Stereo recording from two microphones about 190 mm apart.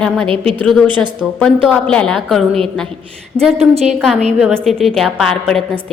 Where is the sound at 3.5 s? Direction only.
30° right (ahead or behind).